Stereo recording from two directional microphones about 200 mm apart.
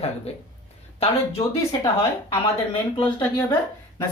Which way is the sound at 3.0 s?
10° left (ahead or behind).